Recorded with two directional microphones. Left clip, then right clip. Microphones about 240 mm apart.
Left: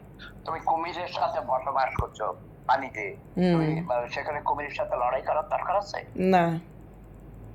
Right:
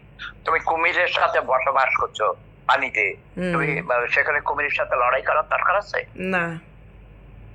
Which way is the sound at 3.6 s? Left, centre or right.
Centre.